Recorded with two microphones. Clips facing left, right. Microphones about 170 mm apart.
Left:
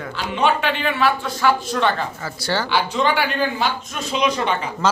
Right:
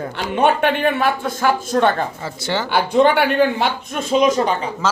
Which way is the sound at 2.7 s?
55° right (ahead or behind).